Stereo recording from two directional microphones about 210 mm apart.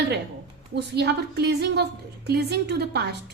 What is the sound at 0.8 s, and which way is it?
A child's voice, 50° right (ahead or behind).